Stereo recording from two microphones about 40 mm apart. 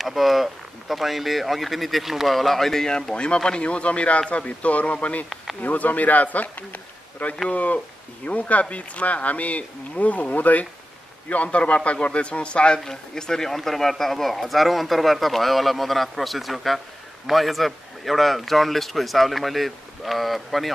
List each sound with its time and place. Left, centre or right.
0.0 s speech: centre; by 10.7 s left
11.2 s speech: left
12.8 s speech: centre